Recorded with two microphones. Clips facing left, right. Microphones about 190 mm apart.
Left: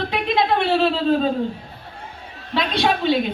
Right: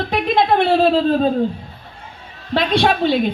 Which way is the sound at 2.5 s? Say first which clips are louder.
Right 5 dB; 50° right (ahead or behind).